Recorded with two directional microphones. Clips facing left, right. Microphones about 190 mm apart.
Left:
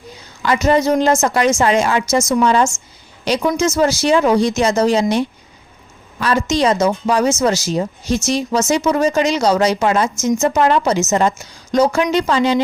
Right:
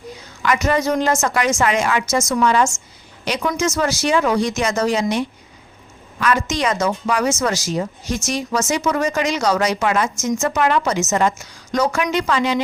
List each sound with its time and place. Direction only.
0.4 s speech: 30° left (ahead or behind)